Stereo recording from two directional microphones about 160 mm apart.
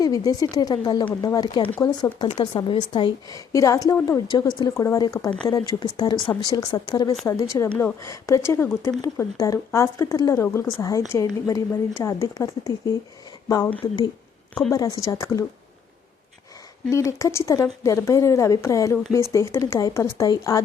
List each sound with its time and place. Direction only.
0.0 s a woman's voice: 25° left (ahead or behind)
14.7 s a woman's voice: 20° left (ahead or behind)
16.9 s a woman's voice: 20° left (ahead or behind)